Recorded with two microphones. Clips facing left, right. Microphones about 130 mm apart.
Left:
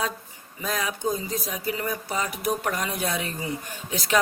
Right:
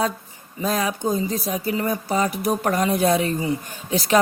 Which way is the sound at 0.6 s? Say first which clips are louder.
Right 5 dB; 35° right (ahead or behind).